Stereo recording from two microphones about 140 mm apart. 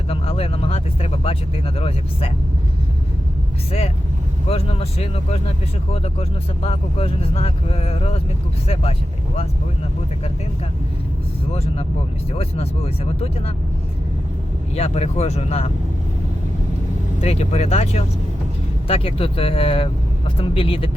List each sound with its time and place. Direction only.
0.1 s speech: 45° left (ahead or behind)
3.7 s speech: 45° left (ahead or behind)
11.5 s speech: 45° left (ahead or behind)
14.8 s speech: 50° left (ahead or behind)
17.2 s speech: 50° left (ahead or behind)